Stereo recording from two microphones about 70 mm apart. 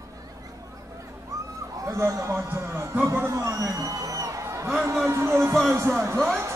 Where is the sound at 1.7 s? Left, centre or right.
Right.